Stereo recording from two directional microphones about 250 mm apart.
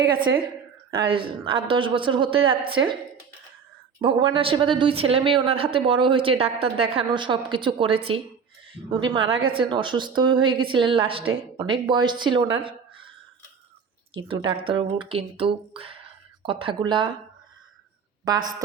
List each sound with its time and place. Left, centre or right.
0.9 s speech: right
4.0 s speech: right
9.2 s a woman's voice: right
9.5 s speech: centre
14.3 s speech: centre
18.3 s a woman's voice: centre